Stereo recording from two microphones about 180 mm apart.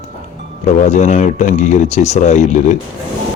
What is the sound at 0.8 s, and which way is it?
Speech, 40° left (ahead or behind).